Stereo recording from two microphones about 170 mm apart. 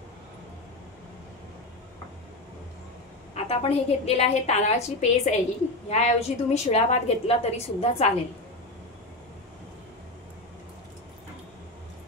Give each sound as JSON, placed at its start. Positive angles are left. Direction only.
{"t": 3.3, "sound": "a woman's voice", "side_deg": 35}